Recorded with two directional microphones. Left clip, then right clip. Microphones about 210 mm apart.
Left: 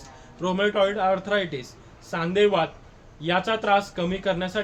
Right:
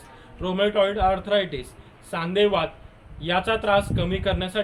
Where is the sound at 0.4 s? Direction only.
15° left (ahead or behind).